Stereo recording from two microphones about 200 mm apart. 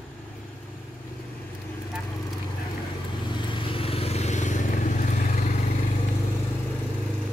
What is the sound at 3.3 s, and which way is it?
Vehicle, 25° left (ahead or behind).